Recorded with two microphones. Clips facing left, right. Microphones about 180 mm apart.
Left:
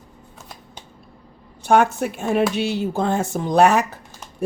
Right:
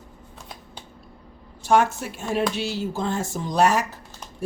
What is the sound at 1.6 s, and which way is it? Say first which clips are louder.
A woman's voice: left 3 dB; 60° left (ahead or behind).